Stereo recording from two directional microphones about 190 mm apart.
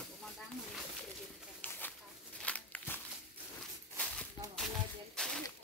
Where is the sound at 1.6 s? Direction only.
10° left (ahead or behind).